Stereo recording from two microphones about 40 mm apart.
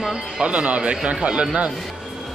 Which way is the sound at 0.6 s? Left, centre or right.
Right.